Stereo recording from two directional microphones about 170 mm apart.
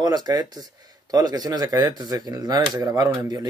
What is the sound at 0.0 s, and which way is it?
Speech, 25° right (ahead or behind).